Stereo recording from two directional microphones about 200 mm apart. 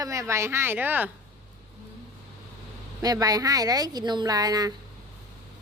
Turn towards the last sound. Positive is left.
turn(degrees=-20)  # may be behind; listen again after turning